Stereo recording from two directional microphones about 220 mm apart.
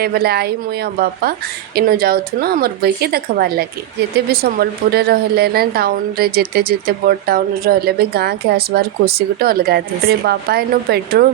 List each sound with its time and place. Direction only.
0.0 s a woman's voice: 45° right (ahead or behind)
1.7 s a woman's voice: 45° right (ahead or behind)